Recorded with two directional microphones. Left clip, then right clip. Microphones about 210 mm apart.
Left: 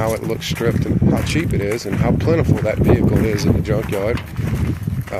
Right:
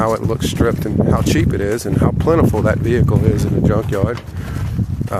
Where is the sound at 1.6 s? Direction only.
20° right (ahead or behind).